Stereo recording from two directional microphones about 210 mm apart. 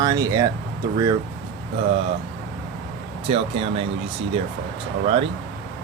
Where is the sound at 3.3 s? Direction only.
25° right (ahead or behind).